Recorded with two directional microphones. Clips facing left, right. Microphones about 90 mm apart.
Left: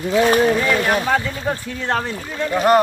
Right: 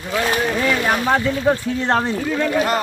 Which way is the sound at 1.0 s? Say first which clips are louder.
Right 3 dB; 15° right (ahead or behind).